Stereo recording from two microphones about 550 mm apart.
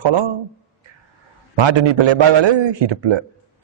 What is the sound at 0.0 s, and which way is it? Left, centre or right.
Speech, right.